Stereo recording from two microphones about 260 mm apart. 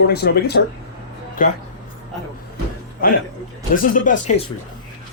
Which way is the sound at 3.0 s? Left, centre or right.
Left.